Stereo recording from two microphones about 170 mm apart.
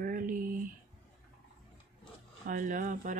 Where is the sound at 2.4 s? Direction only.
55° right (ahead or behind).